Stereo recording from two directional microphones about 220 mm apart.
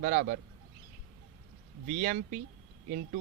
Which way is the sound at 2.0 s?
40° right (ahead or behind).